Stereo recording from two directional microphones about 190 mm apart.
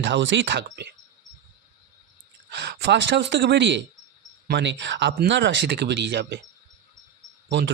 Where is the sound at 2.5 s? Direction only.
65° right (ahead or behind).